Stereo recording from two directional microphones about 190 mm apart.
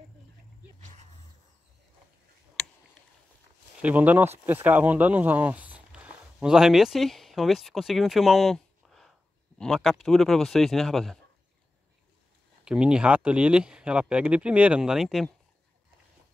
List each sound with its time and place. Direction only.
3.8 s speech: 10° right (ahead or behind)
12.6 s speech: 5° right (ahead or behind)